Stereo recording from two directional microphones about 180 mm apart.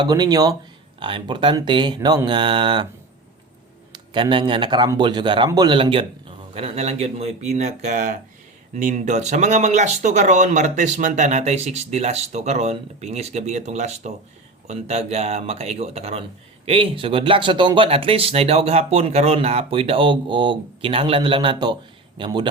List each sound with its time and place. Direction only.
0.0 s speech: 20° right (ahead or behind)
3.9 s speech: 25° right (ahead or behind)